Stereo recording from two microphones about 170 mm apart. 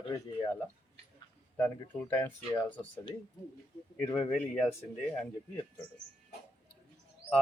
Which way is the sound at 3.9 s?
10° left (ahead or behind).